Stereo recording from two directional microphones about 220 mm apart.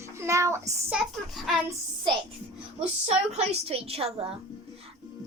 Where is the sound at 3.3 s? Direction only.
30° right (ahead or behind).